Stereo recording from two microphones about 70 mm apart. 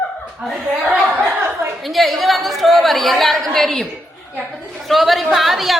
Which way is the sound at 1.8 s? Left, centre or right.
Centre.